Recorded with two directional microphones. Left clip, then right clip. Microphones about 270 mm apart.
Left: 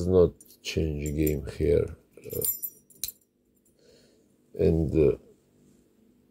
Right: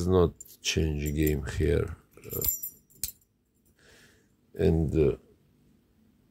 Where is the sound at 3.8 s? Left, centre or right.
Centre.